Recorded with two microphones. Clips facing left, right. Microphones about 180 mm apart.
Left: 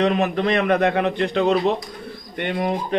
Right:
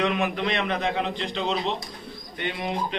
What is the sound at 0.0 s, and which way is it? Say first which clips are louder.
A man's voice: left 6 dB; 40° left (ahead or behind).